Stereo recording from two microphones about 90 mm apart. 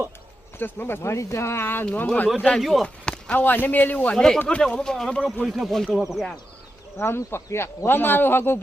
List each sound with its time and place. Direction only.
0.6 s speech: 25° left (ahead or behind)
2.6 s speech: centre (ahead or behind)
2.8 s speech: 15° left (ahead or behind)
4.1 s speech: 5° left (ahead or behind)
6.9 s speech: 25° left (ahead or behind)